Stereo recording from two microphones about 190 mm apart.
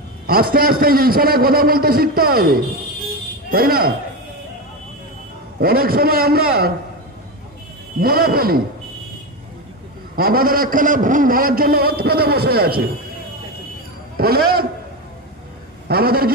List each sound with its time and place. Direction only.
0.3 s a man's voice: 50° right (ahead or behind)
5.6 s a man's voice: 50° right (ahead or behind)
8.0 s a man's voice: 50° right (ahead or behind)
10.1 s a man's voice: 50° right (ahead or behind)
14.1 s a man's voice: 50° right (ahead or behind)
15.9 s a man's voice: 50° right (ahead or behind)